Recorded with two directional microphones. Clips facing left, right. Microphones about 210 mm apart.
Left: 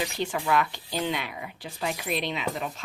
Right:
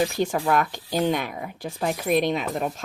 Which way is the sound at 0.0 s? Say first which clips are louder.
Right 6 dB; 45° right (ahead or behind).